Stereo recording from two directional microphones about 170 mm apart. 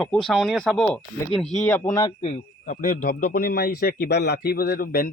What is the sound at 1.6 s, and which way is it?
Speech, 15° left (ahead or behind).